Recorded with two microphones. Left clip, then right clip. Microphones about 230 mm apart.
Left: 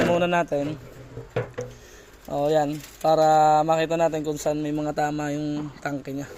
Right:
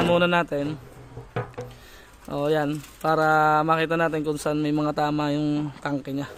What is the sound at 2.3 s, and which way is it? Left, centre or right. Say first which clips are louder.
Speech: left 2 dB; centre.